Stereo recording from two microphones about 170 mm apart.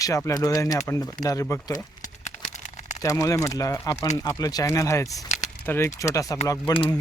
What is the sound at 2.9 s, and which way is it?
Speech, 20° left (ahead or behind).